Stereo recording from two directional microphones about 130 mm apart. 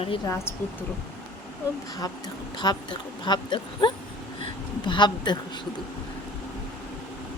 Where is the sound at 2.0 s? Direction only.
30° left (ahead or behind).